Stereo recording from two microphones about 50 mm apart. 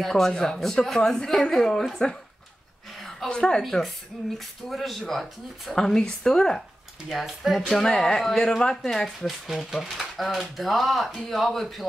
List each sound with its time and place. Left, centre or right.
0.0 s a woman's voice: centre
3.3 s a woman's voice: centre
3.6 s speech: centre
5.8 s a woman's voice: centre
7.1 s speech: centre
7.7 s a woman's voice: centre